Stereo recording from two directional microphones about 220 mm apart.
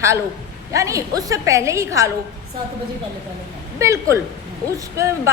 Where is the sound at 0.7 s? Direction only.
15° right (ahead or behind).